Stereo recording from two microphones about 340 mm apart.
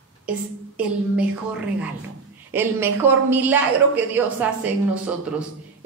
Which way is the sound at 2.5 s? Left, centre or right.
Centre.